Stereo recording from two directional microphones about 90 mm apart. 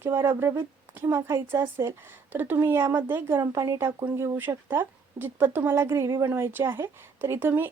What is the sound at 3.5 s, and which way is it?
A woman's voice, 35° right (ahead or behind).